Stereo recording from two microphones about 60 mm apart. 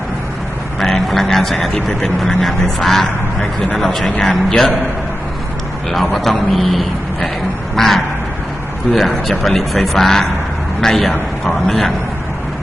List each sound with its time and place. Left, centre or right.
0.8 s a sound: centre
1.7 s speech: centre
5.9 s a man's voice: centre